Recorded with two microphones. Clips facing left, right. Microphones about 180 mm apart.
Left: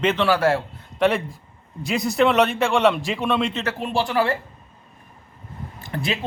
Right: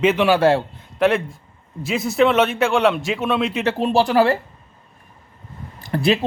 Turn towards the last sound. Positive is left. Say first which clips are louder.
# right 8 dB
turn(degrees=-35)  # may be behind; listen again after turning